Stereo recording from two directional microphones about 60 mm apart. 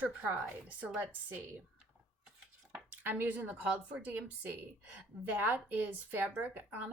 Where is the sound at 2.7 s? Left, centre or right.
Right.